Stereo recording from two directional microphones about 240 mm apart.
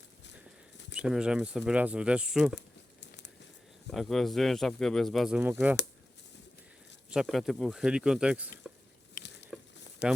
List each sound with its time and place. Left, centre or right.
0.9 s speech: centre
2.6 s crumpling: left
3.9 s speech: centre
7.1 s speech: centre
9.2 s a sound: left
9.5 s a sound: centre